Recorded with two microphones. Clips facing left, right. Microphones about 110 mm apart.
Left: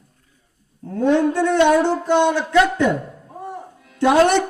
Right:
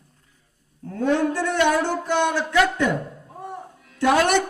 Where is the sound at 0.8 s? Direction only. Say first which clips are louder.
Left 4 dB; 30° left (ahead or behind).